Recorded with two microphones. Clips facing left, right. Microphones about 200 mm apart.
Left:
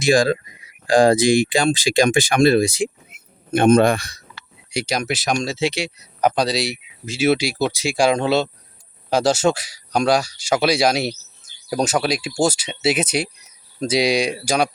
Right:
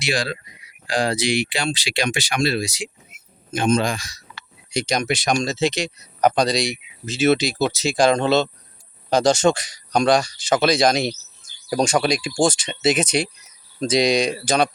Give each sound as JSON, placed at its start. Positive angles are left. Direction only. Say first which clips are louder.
{"t": 0.0, "sound": "a man's voice", "louder": "left 9 dB", "side_deg": 45}
{"t": 4.7, "sound": "speech", "louder": "right 1 dB", "side_deg": 10}